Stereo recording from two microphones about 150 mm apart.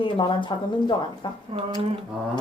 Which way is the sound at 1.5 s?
40° right (ahead or behind).